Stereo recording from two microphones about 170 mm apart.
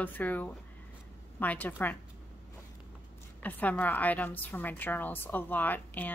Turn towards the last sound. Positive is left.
turn(degrees=10)  # may be behind; listen again after turning